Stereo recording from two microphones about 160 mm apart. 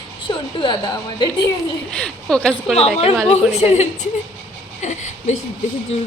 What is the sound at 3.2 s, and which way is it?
Speech, 45° left (ahead or behind).